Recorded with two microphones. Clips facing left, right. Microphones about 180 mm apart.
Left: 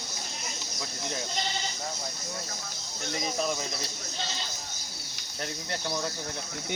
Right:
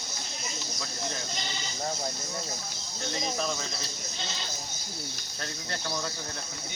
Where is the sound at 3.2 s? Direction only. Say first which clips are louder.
Left 2 dB; 15° left (ahead or behind).